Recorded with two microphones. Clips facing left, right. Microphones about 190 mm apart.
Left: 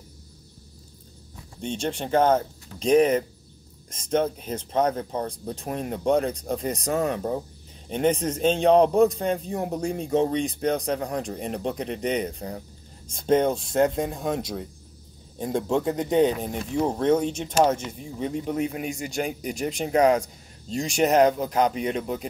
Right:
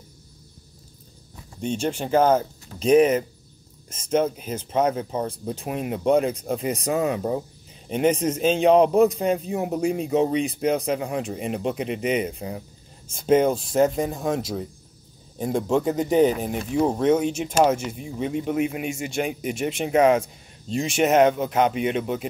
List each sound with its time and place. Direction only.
1.6 s a man's voice: 5° right (ahead or behind)
4.1 s a man's voice: 5° right (ahead or behind)
18.9 s speech: 40° left (ahead or behind)
20.0 s speech: 5° right (ahead or behind)